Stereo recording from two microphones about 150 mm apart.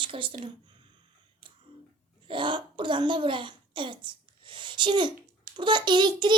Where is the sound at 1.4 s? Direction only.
35° right (ahead or behind).